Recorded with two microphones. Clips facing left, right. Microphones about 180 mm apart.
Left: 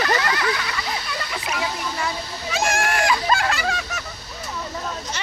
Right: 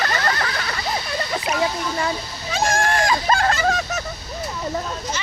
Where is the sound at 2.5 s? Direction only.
35° right (ahead or behind).